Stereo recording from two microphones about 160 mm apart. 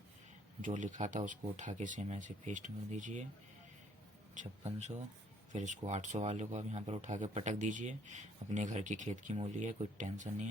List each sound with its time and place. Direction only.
0.6 s a man's voice: 50° right (ahead or behind)
5.5 s a man's voice: 50° right (ahead or behind)